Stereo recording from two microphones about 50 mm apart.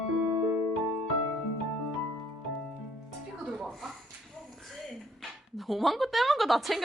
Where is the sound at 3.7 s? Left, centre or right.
Centre.